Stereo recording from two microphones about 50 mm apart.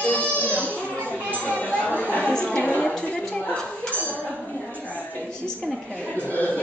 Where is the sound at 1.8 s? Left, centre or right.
Left.